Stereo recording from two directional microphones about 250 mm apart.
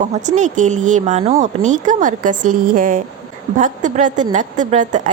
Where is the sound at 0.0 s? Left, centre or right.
Right.